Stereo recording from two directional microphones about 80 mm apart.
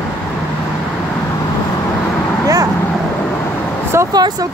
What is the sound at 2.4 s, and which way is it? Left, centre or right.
Vehicle, right.